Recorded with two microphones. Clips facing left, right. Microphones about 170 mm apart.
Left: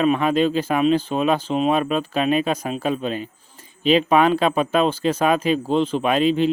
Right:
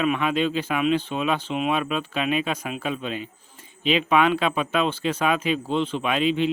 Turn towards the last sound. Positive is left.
turn(degrees=40)  # may be behind; listen again after turning